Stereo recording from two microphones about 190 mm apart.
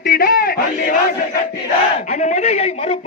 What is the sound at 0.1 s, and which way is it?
Battle cry, 50° left (ahead or behind).